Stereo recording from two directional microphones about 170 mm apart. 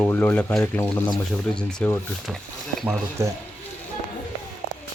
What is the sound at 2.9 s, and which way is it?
Speech, 15° right (ahead or behind).